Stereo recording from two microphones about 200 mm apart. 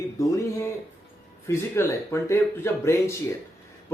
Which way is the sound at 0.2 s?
15° left (ahead or behind).